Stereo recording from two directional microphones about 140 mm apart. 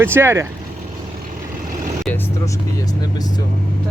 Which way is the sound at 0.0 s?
15° right (ahead or behind).